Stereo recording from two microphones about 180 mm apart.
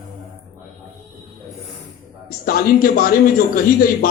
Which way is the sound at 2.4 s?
55° left (ahead or behind).